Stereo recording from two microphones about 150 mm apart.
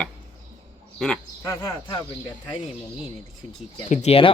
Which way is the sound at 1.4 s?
20° left (ahead or behind).